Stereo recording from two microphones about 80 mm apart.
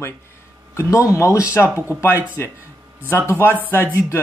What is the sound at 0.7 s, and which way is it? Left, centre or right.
Speech, left.